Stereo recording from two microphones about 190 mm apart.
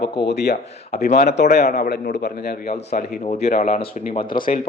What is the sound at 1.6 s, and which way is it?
Speech, 40° left (ahead or behind).